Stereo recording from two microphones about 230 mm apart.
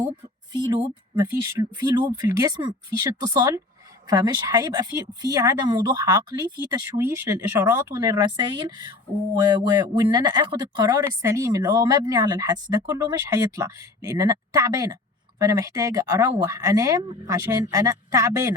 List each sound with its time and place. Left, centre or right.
0.5 s speech: centre